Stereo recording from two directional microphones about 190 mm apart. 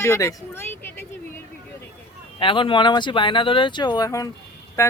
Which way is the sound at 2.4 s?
25° left (ahead or behind).